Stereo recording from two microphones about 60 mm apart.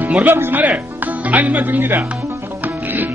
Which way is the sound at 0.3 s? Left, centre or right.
Right.